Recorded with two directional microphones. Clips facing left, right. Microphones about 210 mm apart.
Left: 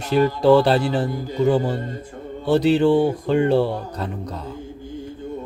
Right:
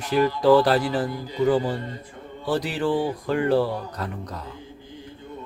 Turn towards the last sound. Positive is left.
turn(degrees=25)  # may be behind; listen again after turning